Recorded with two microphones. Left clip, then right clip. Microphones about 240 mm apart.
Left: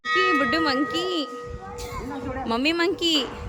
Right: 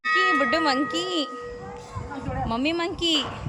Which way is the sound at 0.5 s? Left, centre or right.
Centre.